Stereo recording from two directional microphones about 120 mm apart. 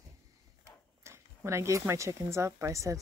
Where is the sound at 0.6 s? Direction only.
25° right (ahead or behind).